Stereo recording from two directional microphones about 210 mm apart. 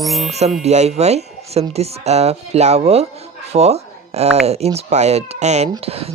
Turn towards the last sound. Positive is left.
turn(degrees=-30)  # may be behind; listen again after turning